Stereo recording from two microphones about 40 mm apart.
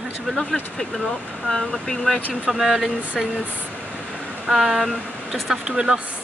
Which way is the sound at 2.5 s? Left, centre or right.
Centre.